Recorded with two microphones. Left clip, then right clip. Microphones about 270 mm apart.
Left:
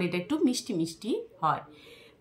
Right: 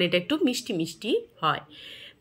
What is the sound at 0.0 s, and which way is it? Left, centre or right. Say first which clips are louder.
Speech: right 5 dB; centre.